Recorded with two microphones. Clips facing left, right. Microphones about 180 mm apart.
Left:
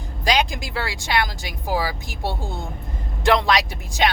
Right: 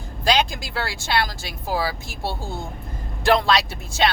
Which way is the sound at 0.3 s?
15° left (ahead or behind).